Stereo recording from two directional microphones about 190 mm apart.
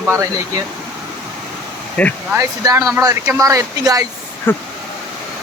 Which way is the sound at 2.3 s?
15° right (ahead or behind).